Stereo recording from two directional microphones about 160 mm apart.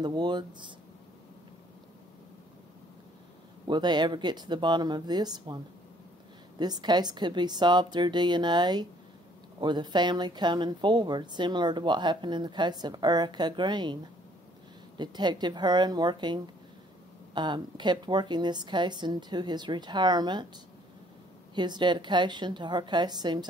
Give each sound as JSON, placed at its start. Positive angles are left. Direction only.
{"t": 0.0, "sound": "speech", "side_deg": -25}
{"t": 3.6, "sound": "speech", "side_deg": -25}
{"t": 6.6, "sound": "speech", "side_deg": -25}
{"t": 15.0, "sound": "speech", "side_deg": -25}
{"t": 21.5, "sound": "speech", "side_deg": -30}